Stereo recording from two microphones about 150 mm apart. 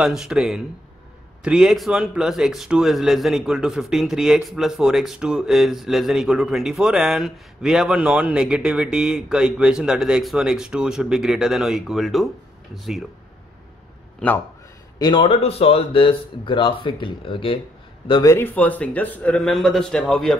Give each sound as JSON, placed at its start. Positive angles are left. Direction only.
{"t": 0.0, "sound": "a man's voice", "side_deg": -5}
{"t": 15.0, "sound": "speech", "side_deg": 30}
{"t": 15.3, "sound": "speech", "side_deg": 40}
{"t": 18.2, "sound": "a man's voice", "side_deg": 15}